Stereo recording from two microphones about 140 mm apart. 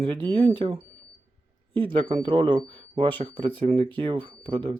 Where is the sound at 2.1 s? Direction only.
40° right (ahead or behind).